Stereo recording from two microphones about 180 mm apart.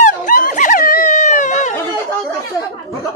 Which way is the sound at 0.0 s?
50° left (ahead or behind).